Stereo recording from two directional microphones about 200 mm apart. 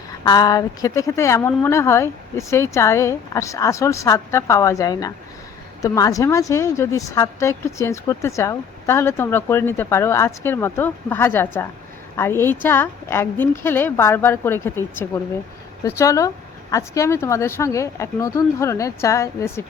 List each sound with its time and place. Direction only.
0.3 s a woman's voice: 20° left (ahead or behind)